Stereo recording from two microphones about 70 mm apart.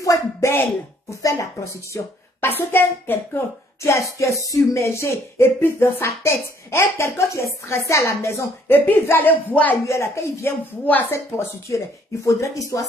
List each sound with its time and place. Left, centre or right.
0.0 s a sound: left
1.2 s a woman's voice: left
2.4 s music: left
3.8 s music: left
7.6 s a woman's voice: left
8.7 s speech: left
9.8 s a woman's voice: left
10.9 s speech: left
11.1 s music: left
12.4 s a woman's voice: left